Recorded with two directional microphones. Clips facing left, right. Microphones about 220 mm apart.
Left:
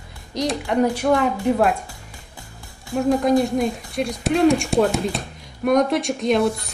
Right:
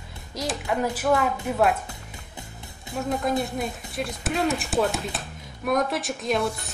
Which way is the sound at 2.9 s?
20° right (ahead or behind).